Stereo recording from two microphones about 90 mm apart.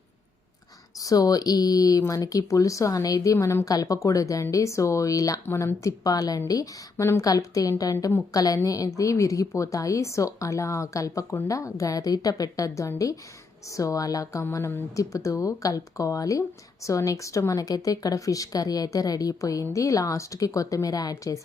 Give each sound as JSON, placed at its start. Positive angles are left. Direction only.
{"t": 0.9, "sound": "speech", "side_deg": 40}
{"t": 6.9, "sound": "a woman's voice", "side_deg": 25}
{"t": 7.2, "sound": "speech", "side_deg": 40}